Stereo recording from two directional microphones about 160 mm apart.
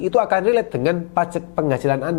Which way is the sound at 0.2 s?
10° left (ahead or behind).